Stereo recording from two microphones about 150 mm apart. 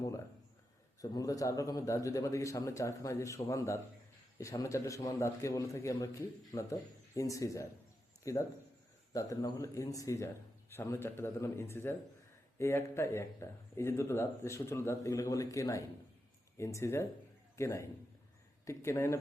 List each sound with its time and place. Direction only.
1.0 s a man's voice: 20° left (ahead or behind)